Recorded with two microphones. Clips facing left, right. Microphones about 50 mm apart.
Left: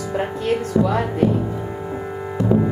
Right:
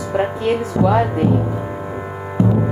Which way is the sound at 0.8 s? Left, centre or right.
Right.